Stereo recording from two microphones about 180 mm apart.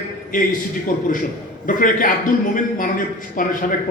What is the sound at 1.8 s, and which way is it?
A man's voice, 50° left (ahead or behind).